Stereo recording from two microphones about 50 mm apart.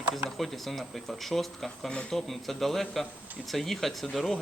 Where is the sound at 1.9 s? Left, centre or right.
Centre.